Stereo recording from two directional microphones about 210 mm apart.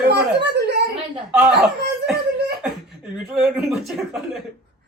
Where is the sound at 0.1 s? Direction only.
55° right (ahead or behind).